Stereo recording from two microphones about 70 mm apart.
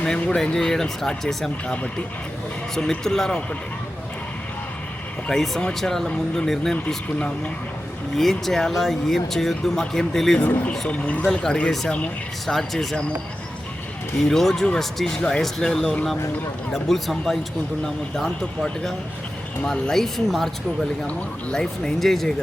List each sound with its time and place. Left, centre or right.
0.2 s speech: centre
1.6 s speech: centre
5.3 s speech: centre
6.7 s speech: centre
8.1 s speech: centre
10.7 s speech: centre
12.5 s speech: centre
14.3 s speech: centre